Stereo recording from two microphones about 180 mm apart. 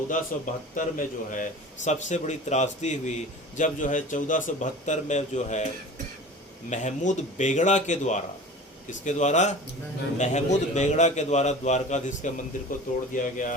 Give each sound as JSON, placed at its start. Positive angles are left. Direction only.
{"t": 0.3, "sound": "a man's voice", "side_deg": 45}
{"t": 6.7, "sound": "a man's voice", "side_deg": 40}